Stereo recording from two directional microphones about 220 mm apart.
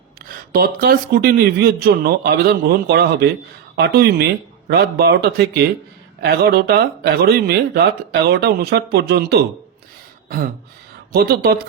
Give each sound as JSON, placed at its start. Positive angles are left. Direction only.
{"t": 0.2, "sound": "speech", "side_deg": -40}
{"t": 10.2, "sound": "throat clearing", "side_deg": -40}
{"t": 11.1, "sound": "speech", "side_deg": -45}